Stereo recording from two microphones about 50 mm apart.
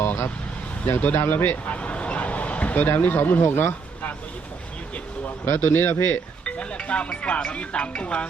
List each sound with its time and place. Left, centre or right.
0.9 s a man's voice: left
1.6 s a sound: left
5.5 s a man's voice: left
6.4 s speech: left